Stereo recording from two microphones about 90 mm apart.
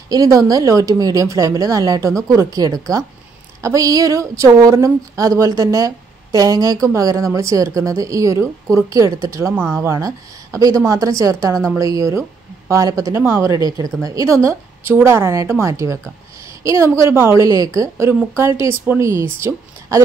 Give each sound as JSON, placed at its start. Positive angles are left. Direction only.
{"t": 0.1, "sound": "a woman's voice", "side_deg": -40}